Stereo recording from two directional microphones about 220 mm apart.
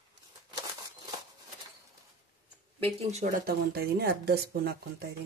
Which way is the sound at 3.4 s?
45° right (ahead or behind).